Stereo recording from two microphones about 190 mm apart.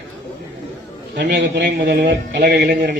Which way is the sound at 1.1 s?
60° right (ahead or behind).